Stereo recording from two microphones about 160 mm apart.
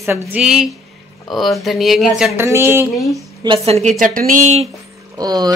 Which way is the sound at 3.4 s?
35° right (ahead or behind).